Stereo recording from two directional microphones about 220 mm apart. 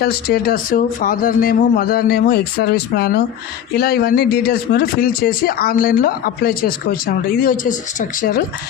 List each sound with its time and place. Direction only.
0.0 s a man's voice: 45° left (ahead or behind)